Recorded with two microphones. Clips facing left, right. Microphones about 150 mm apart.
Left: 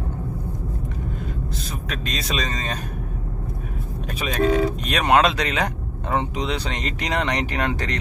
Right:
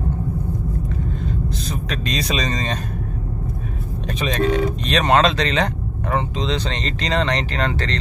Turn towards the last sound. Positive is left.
turn(degrees=15)  # may be behind; listen again after turning